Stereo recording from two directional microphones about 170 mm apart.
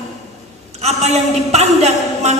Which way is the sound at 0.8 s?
40° right (ahead or behind).